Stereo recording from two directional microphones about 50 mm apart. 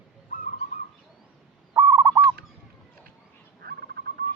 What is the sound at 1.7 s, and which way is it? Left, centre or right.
Owl, right.